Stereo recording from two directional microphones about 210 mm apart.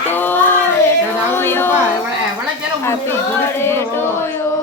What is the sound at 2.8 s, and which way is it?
Speech, 10° left (ahead or behind).